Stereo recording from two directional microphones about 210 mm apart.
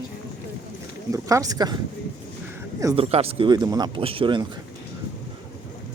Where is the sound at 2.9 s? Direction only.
30° right (ahead or behind).